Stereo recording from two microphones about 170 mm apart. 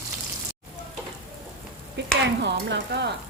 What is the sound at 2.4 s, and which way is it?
Stir, 90° right.